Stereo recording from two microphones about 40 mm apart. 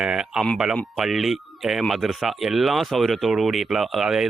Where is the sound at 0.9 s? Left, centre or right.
Centre.